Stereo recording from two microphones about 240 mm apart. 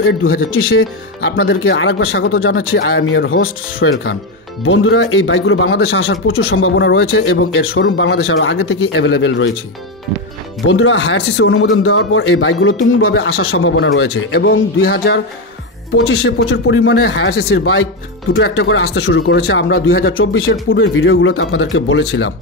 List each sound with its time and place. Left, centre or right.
0.5 s speech: left
10.7 s speech: left
16.0 s speech: left
19.2 s speech: left